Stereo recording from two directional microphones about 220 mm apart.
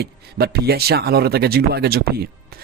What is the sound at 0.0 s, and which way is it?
Speech, 45° right (ahead or behind).